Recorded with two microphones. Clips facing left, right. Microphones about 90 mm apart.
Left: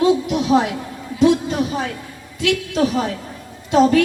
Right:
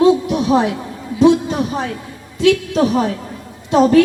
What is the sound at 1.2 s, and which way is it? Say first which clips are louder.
A woman's voice: right 3 dB; 25° right (ahead or behind).